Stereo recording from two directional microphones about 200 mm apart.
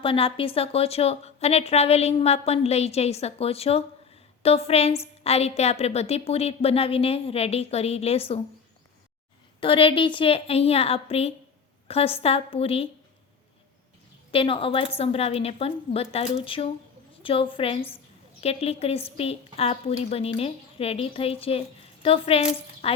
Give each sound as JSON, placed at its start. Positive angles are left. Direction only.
{"t": 0.0, "sound": "a woman's voice", "side_deg": 25}
{"t": 9.6, "sound": "a woman's voice", "side_deg": 25}
{"t": 14.3, "sound": "a woman's voice", "side_deg": 25}